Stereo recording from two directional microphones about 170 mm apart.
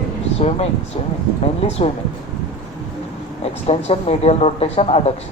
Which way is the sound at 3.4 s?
35° left (ahead or behind).